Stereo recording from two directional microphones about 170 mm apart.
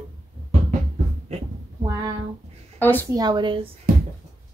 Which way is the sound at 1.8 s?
20° right (ahead or behind).